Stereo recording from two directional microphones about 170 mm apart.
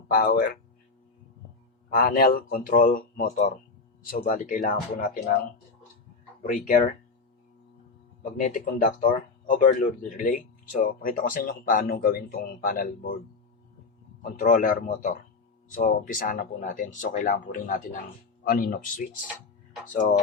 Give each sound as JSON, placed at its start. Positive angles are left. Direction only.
{"t": 0.1, "sound": "speech", "side_deg": 60}
{"t": 1.9, "sound": "speech", "side_deg": 60}
{"t": 8.2, "sound": "speech", "side_deg": 45}
{"t": 10.2, "sound": "speech", "side_deg": 50}
{"t": 14.2, "sound": "speech", "side_deg": 50}